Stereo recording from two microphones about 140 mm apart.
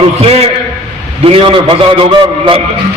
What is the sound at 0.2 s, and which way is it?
A man's voice, 45° right (ahead or behind).